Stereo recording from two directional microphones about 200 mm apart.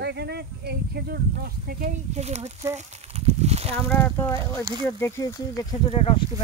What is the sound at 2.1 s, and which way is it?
Speech, 35° right (ahead or behind).